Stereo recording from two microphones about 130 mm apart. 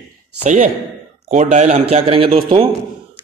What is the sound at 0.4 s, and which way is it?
A man's voice, 70° right (ahead or behind).